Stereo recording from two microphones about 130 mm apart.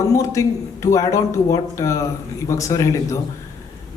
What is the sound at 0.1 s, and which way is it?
A man's voice, 25° left (ahead or behind).